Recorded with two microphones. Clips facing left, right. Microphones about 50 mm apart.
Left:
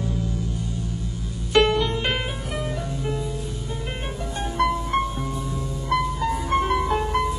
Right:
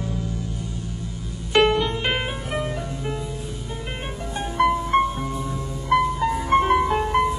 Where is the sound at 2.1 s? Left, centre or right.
Centre.